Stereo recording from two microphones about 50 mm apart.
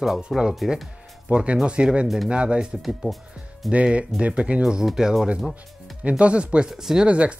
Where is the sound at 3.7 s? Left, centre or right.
Right.